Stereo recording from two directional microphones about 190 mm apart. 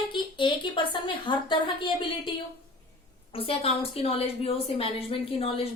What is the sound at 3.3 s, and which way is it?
A woman's voice, 30° left (ahead or behind).